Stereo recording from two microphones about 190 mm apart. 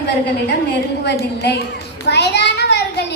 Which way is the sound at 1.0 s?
60° left (ahead or behind).